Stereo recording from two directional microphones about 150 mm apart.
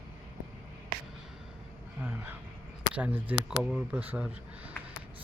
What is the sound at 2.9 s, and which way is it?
Speech, 10° right (ahead or behind).